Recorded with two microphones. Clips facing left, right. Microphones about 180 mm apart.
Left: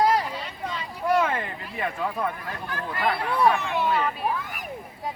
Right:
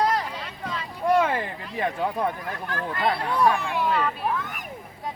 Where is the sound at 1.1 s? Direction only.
30° right (ahead or behind).